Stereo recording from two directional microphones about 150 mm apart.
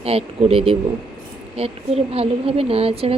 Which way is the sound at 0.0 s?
40° right (ahead or behind).